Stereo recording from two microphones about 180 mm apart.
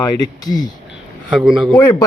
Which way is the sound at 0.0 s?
20° left (ahead or behind).